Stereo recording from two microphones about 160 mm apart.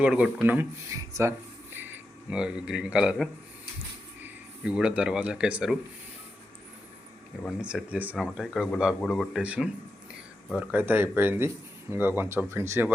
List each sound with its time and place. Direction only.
0.0 s a man's voice: 5° right (ahead or behind)
7.6 s a man's voice: 5° right (ahead or behind)